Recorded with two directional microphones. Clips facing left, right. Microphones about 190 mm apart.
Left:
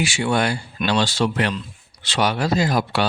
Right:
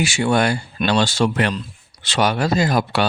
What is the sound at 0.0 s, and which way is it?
Speech, 45° right (ahead or behind).